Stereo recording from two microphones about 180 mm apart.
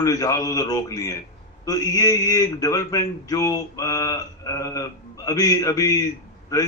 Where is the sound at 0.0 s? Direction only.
20° left (ahead or behind).